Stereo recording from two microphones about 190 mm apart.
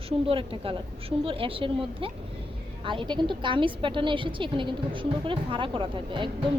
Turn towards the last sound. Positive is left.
turn(degrees=-25)  # may be behind; listen again after turning